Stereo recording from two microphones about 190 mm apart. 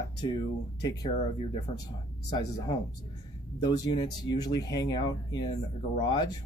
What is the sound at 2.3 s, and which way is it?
Speech, 20° left (ahead or behind).